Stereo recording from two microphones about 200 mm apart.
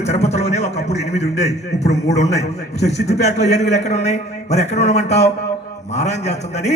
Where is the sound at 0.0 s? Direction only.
35° left (ahead or behind).